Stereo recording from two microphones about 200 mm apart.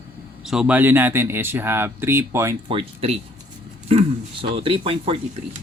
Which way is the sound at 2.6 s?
25° right (ahead or behind).